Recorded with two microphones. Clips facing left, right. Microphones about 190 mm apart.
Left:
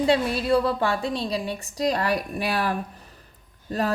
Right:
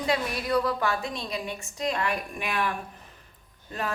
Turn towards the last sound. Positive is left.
turn(degrees=35)  # may be behind; listen again after turning